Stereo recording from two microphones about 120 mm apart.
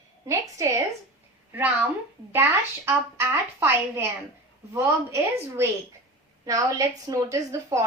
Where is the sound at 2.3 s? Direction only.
20° right (ahead or behind).